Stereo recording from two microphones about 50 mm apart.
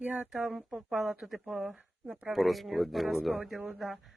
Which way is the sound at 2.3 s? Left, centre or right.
Centre.